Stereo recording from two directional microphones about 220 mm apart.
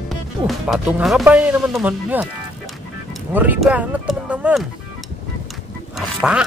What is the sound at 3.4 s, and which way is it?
Speech, 5° right (ahead or behind).